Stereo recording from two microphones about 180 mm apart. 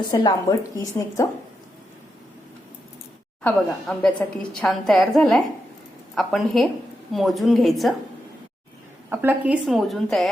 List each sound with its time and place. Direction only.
0.1 s a woman's voice: 20° left (ahead or behind)
3.4 s a woman's voice: 5° left (ahead or behind)
9.0 s a woman's voice: 10° right (ahead or behind)